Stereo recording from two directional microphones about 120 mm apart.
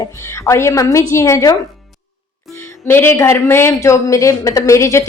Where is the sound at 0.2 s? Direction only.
25° left (ahead or behind).